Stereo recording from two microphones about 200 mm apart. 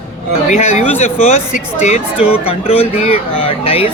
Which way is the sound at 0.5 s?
35° left (ahead or behind).